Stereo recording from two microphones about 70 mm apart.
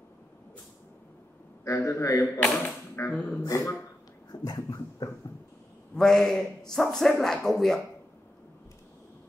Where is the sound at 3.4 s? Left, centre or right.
Left.